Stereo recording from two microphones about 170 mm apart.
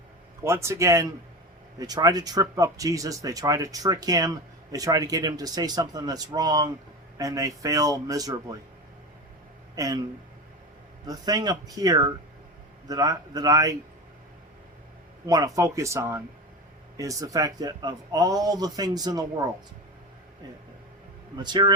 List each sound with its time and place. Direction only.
0.4 s speech: 15° right (ahead or behind)
9.7 s speech: 20° right (ahead or behind)
11.0 s speech: 20° right (ahead or behind)
15.3 s speech: 20° right (ahead or behind)
21.3 s speech: 25° right (ahead or behind)